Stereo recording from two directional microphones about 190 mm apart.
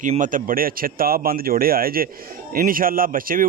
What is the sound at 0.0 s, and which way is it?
Speech, 45° right (ahead or behind).